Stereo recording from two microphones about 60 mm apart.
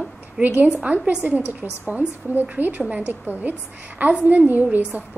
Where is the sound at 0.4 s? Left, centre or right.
Right.